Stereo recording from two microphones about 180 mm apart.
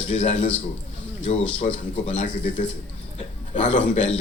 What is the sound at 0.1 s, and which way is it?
Speech, 35° left (ahead or behind).